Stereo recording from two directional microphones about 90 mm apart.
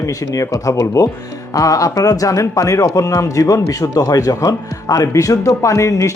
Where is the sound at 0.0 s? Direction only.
40° left (ahead or behind).